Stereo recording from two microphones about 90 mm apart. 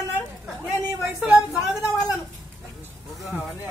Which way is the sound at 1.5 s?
5° right (ahead or behind).